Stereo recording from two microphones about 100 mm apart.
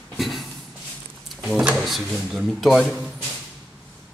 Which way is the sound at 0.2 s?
Centre (ahead or behind).